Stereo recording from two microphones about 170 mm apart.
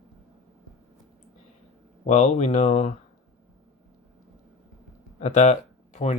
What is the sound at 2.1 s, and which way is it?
Speech, 40° left (ahead or behind).